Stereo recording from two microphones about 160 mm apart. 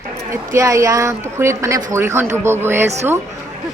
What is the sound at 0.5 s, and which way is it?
A woman's voice, 20° right (ahead or behind).